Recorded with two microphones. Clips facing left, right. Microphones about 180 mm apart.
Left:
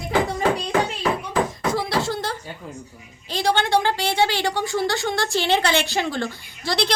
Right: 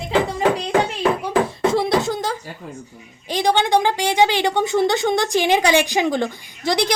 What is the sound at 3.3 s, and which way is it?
A woman's voice, 15° right (ahead or behind).